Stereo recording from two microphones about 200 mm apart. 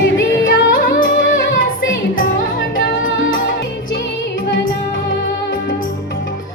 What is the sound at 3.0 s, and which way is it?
Music, 75° left (ahead or behind).